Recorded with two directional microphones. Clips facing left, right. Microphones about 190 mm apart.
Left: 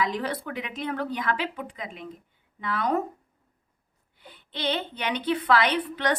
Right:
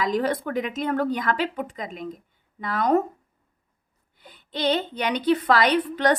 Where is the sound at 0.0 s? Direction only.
45° right (ahead or behind).